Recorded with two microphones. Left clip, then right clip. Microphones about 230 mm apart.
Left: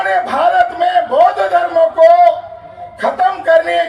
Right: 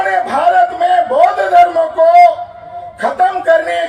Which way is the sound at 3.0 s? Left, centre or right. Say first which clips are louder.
Right 1 dB; left.